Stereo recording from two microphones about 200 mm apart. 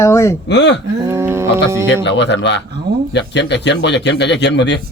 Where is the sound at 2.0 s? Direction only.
60° left (ahead or behind).